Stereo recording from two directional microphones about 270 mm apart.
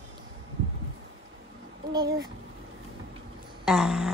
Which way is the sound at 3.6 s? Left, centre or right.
Centre.